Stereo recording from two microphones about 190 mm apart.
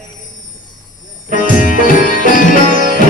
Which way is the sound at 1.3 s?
45° left (ahead or behind).